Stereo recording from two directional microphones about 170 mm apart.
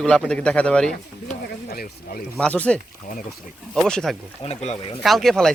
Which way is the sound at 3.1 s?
60° left (ahead or behind).